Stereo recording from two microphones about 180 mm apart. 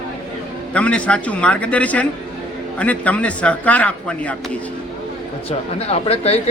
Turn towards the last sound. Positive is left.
turn(degrees=35)  # may be behind; listen again after turning